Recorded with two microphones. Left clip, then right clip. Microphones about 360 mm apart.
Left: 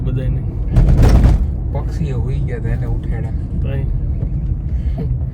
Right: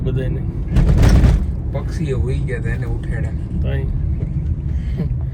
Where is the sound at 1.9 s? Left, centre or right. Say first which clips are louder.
Right 3 dB; centre.